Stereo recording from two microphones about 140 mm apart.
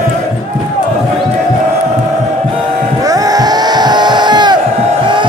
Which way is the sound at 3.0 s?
25° right (ahead or behind).